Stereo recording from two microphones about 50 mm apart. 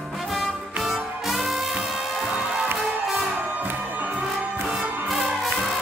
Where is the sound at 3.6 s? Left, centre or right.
Right.